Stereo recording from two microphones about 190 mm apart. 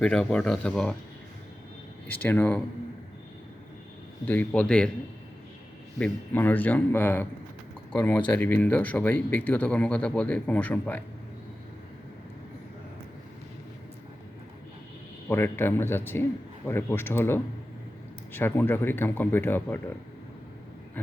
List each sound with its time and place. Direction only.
0.0 s speech: 5° left (ahead or behind)
2.0 s speech: 10° left (ahead or behind)
4.3 s speech: 5° left (ahead or behind)
6.0 s speech: 10° left (ahead or behind)
15.3 s speech: 10° left (ahead or behind)